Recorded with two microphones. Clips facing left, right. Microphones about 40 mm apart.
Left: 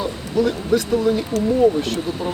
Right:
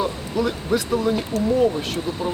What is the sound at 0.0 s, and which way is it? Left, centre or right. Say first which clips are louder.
Speech: left 2 dB; centre.